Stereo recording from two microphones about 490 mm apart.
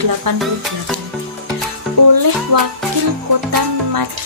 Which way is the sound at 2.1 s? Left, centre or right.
Right.